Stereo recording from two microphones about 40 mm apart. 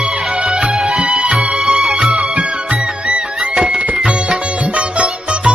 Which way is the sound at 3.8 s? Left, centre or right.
Right.